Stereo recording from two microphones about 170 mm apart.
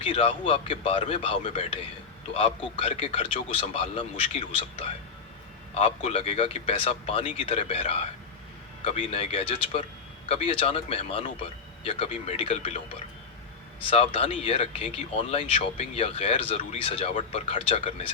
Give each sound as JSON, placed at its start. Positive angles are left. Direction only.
{"t": 0.0, "sound": "speech", "side_deg": 35}
{"t": 13.8, "sound": "speech", "side_deg": 35}